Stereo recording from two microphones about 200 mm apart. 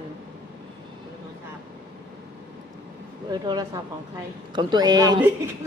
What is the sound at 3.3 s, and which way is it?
Speech, 20° right (ahead or behind).